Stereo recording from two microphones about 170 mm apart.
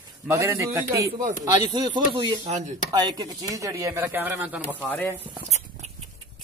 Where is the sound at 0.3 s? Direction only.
15° right (ahead or behind).